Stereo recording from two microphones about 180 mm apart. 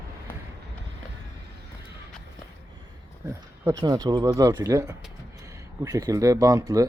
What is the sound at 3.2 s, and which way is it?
Speech, 15° right (ahead or behind).